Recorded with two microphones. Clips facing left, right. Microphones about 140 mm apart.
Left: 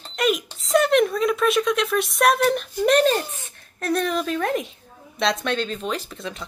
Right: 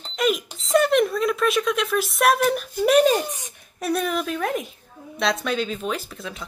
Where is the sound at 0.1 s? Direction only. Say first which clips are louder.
Even; centre (ahead or behind).